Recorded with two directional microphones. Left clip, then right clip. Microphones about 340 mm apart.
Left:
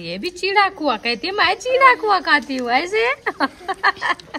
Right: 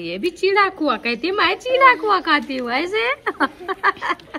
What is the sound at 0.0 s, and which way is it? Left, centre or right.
A woman's voice, left.